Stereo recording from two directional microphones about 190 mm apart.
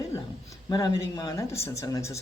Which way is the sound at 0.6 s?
20° left (ahead or behind).